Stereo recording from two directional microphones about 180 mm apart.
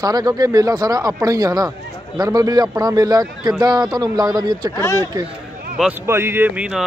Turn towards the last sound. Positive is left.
turn(degrees=-5)  # may be behind; listen again after turning